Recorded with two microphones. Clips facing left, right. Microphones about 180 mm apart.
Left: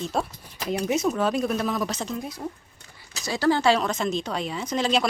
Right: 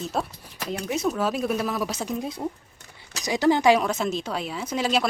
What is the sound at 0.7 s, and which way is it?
Speech, 20° left (ahead or behind).